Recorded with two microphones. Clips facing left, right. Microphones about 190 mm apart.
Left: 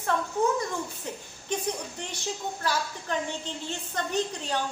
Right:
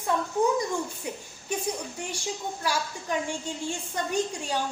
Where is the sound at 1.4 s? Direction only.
10° right (ahead or behind).